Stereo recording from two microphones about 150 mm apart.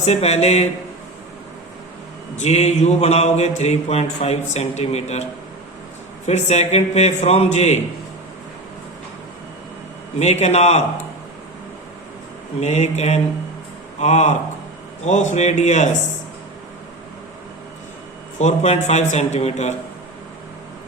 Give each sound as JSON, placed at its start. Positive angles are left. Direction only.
{"t": 0.0, "sound": "mantra", "side_deg": 45}
{"t": 2.3, "sound": "mantra", "side_deg": 50}
{"t": 10.2, "sound": "mantra", "side_deg": 45}
{"t": 12.5, "sound": "mantra", "side_deg": 50}
{"t": 18.3, "sound": "mantra", "side_deg": 50}